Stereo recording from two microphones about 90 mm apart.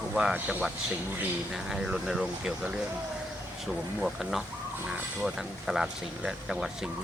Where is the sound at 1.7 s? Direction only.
5° right (ahead or behind).